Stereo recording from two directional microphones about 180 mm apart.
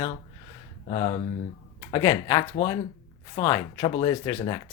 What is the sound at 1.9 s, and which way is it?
Speech, 20° left (ahead or behind).